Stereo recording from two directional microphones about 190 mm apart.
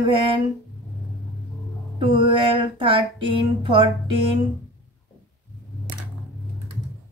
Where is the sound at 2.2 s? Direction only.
25° right (ahead or behind).